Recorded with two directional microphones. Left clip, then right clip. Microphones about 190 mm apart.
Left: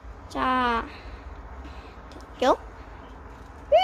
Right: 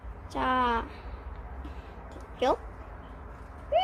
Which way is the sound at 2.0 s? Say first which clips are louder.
Left 5 dB; 20° left (ahead or behind).